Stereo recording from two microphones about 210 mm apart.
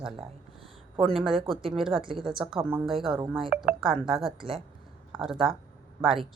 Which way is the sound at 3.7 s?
Centre (ahead or behind).